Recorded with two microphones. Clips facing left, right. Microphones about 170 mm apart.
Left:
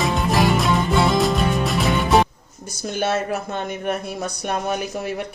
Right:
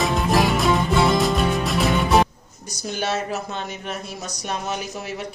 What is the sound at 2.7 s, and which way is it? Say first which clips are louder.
Speech: left 3 dB; 55° left (ahead or behind).